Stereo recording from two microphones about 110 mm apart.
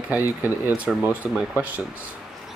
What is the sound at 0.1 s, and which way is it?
Speech, 15° right (ahead or behind).